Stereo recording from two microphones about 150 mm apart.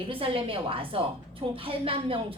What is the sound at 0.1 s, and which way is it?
A woman's voice, 40° right (ahead or behind).